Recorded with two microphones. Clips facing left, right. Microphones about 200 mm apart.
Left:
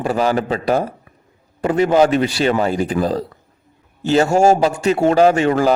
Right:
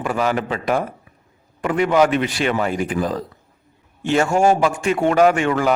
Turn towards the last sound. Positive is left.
turn(degrees=35)  # may be behind; listen again after turning